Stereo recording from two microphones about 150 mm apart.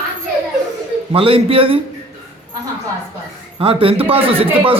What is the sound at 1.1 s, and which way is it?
Speech, 40° right (ahead or behind).